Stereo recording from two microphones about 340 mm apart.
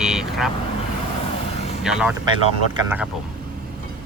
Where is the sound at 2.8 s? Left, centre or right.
Centre.